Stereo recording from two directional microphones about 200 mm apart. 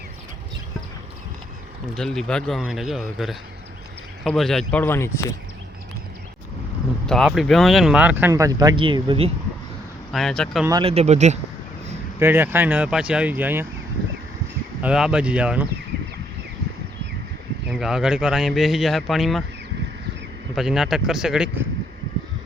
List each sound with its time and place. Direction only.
2.0 s speech: 5° left (ahead or behind)
7.1 s speech: centre (ahead or behind); by 9.3 s 25° right (ahead or behind)
10.1 s speech: centre (ahead or behind)
10.7 s speech: 25° right (ahead or behind)
12.2 s speech: 10° right (ahead or behind)
14.8 s speech: 5° right (ahead or behind)
17.7 s speech: 5° right (ahead or behind)
20.6 s speech: centre (ahead or behind)